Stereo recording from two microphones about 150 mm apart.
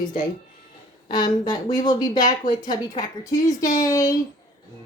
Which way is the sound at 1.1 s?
30° left (ahead or behind).